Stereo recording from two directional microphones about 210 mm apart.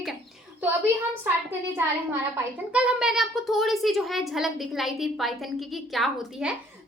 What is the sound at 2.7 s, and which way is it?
A child's voice, 5° right (ahead or behind).